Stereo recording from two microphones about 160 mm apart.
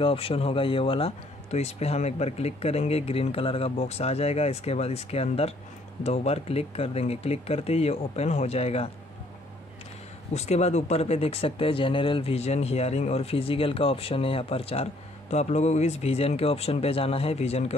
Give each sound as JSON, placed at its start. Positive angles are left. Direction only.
{"t": 0.0, "sound": "speech", "side_deg": 35}
{"t": 10.3, "sound": "speech", "side_deg": 40}